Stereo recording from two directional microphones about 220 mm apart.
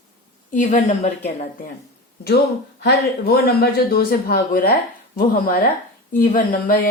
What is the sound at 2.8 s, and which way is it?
A woman's voice, 45° left (ahead or behind).